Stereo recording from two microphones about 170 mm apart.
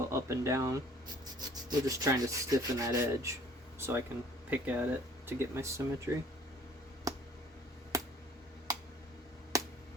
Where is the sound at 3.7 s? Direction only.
15° right (ahead or behind).